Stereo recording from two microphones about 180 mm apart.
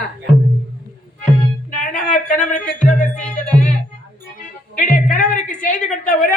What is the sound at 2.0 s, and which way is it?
Speech, 45° left (ahead or behind).